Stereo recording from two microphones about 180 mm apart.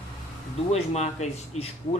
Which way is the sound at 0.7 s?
40° left (ahead or behind).